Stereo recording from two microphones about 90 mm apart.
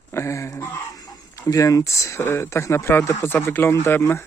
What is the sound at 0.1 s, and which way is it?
Speech, 30° left (ahead or behind).